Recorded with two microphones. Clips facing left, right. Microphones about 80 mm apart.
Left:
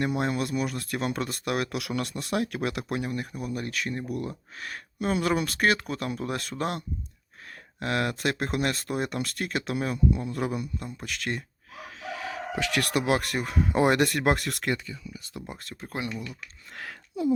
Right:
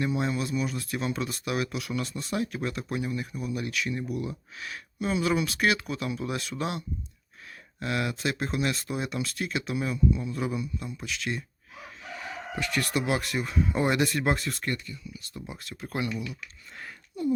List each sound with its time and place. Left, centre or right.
0.0 s speech: left
12.0 s speech: left
15.4 s speech: left
15.8 s speech: left
16.7 s speech: left